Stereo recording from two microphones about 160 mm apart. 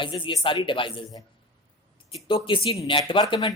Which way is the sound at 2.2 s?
35° left (ahead or behind).